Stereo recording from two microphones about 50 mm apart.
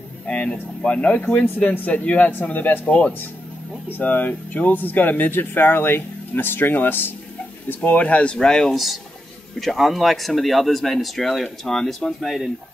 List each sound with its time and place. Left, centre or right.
0.3 s speech: left
4.0 s speech: left; by 8.7 s centre
9.6 s speech: centre